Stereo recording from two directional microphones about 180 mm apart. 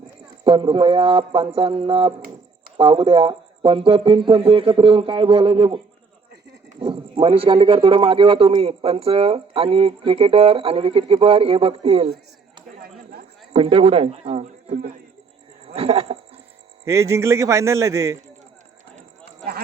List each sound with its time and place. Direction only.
0.4 s speech: 30° right (ahead or behind)
13.5 s speech: 35° right (ahead or behind)
16.8 s a man's voice: 15° right (ahead or behind)